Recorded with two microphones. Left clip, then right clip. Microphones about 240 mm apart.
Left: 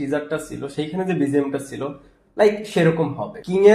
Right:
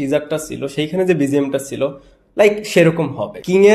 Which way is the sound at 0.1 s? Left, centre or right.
Right.